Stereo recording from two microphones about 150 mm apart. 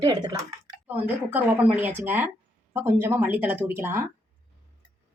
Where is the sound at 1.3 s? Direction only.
10° right (ahead or behind).